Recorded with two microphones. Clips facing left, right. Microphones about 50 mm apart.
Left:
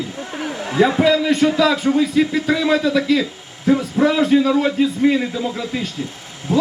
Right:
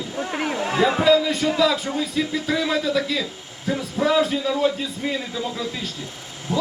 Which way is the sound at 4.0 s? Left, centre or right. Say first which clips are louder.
Left 3 dB; left.